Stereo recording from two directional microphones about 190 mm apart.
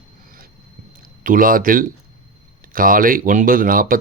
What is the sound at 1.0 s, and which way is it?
Speech, 45° right (ahead or behind).